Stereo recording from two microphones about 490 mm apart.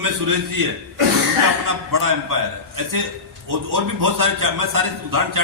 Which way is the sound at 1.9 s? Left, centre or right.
Right.